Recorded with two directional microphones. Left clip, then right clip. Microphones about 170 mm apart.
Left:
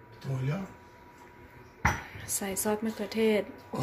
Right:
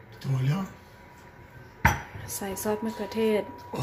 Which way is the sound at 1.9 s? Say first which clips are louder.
Right 2 dB; 5° left (ahead or behind).